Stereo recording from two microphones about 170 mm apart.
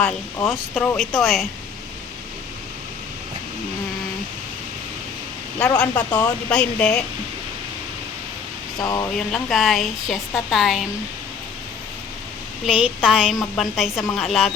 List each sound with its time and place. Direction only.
0.0 s a woman's voice: 5° left (ahead or behind)
5.5 s a woman's voice: 5° left (ahead or behind)
8.8 s speech: 20° left (ahead or behind)
9.3 s a woman's voice: centre (ahead or behind)
12.6 s a woman's voice: 5° right (ahead or behind)